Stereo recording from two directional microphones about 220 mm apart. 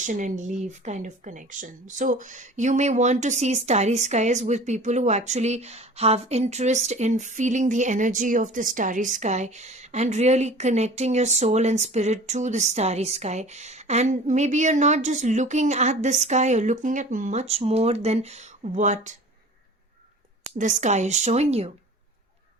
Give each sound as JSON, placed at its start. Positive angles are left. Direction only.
{"t": 0.0, "sound": "speech", "side_deg": -35}
{"t": 20.6, "sound": "speech", "side_deg": -35}